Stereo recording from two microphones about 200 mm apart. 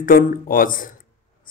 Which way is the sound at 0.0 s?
45° left (ahead or behind).